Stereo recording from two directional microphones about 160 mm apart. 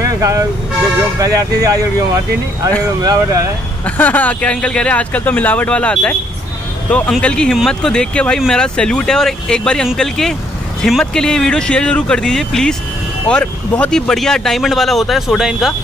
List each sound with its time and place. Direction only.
0.0 s speech: 20° right (ahead or behind)
3.0 s speech: 20° right (ahead or behind)
3.8 s speech: 10° left (ahead or behind)